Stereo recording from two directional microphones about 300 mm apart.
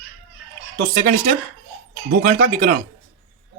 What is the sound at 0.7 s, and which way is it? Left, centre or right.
Speech, right.